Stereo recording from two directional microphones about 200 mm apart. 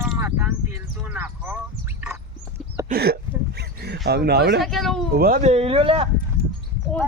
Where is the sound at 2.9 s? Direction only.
50° right (ahead or behind).